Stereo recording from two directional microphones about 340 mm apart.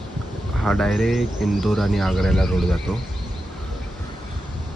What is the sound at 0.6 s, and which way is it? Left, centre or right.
Speech, centre.